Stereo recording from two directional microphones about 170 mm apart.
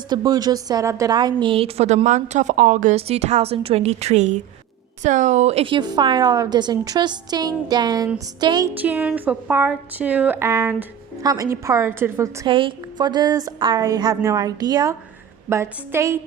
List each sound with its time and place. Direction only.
0.1 s a woman's voice: 25° right (ahead or behind)
8.8 s speech: 10° right (ahead or behind)
12.5 s speech: 30° right (ahead or behind); by 16.2 s 15° right (ahead or behind)